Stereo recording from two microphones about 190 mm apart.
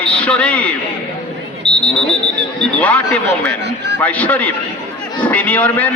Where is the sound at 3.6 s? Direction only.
65° right (ahead or behind).